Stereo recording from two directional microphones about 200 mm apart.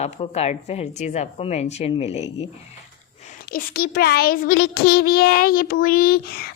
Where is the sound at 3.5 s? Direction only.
50° left (ahead or behind).